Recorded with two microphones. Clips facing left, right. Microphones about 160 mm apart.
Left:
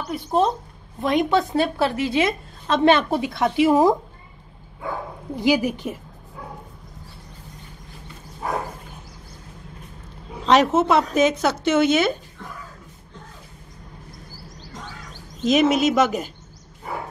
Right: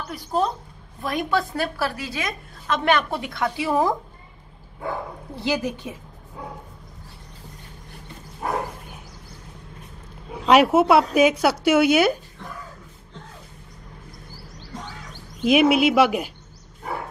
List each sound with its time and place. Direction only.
0.1 s a woman's voice: 25° left (ahead or behind)
5.3 s a woman's voice: 15° left (ahead or behind)
10.4 s speech: 10° right (ahead or behind)
15.4 s speech: 10° right (ahead or behind)